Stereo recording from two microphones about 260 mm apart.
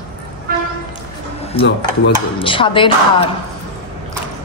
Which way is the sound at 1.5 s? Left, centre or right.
Left.